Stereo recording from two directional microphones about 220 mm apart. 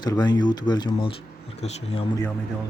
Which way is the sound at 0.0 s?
20° left (ahead or behind).